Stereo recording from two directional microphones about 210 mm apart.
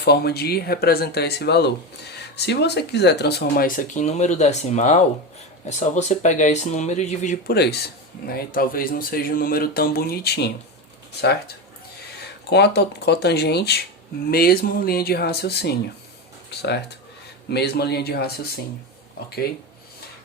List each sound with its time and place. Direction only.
0.0 s speech: 50° left (ahead or behind)
7.5 s speech: 50° left (ahead or behind)